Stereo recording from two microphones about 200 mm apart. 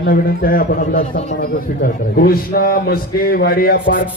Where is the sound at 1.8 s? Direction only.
50° left (ahead or behind).